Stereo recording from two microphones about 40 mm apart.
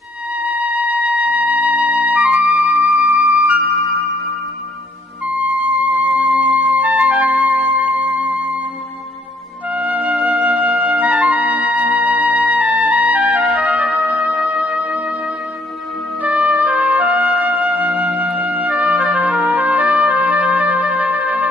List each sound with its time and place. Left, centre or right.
0.6 s music: right
6.1 s music: right
7.6 s music: right
9.6 s music: right
14.6 s music: right
16.2 s trumpet: right
17.4 s music: right
17.8 s music: right
18.5 s trumpet: right